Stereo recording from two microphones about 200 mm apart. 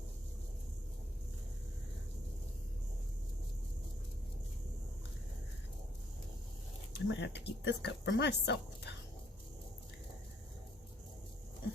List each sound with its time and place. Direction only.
6.9 s speech: 60° left (ahead or behind)